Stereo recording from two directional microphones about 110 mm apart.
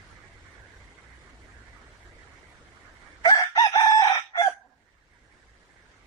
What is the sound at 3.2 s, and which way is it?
Chicken, 40° left (ahead or behind).